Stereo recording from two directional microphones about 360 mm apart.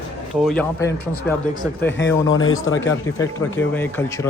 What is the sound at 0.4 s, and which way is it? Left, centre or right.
Speech, centre.